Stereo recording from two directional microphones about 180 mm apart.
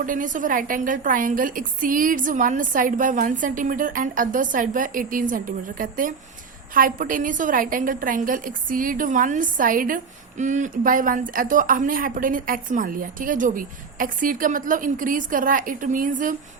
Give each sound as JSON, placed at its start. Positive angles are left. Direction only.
{"t": 0.0, "sound": "a woman's voice", "side_deg": -45}